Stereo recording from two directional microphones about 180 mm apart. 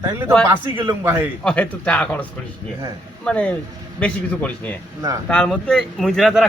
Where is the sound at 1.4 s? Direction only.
5° left (ahead or behind).